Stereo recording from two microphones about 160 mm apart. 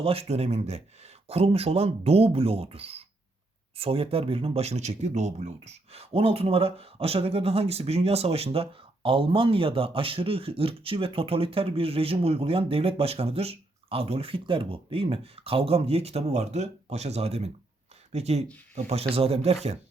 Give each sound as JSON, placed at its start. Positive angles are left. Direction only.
{"t": 0.0, "sound": "speech", "side_deg": -35}